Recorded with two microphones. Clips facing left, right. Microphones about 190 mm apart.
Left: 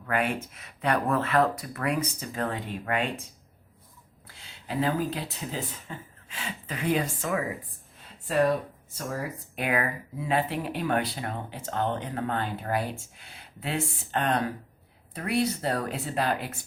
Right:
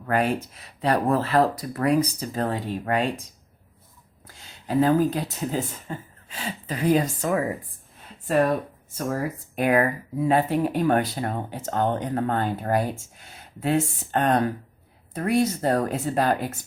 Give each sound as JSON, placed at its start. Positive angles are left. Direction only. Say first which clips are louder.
{"t": 0.0, "sound": "speech", "louder": "right 5 dB", "side_deg": -40}
{"t": 4.3, "sound": "speech", "louder": "right 8 dB", "side_deg": -45}
{"t": 9.1, "sound": "speech", "louder": "right 6 dB", "side_deg": -45}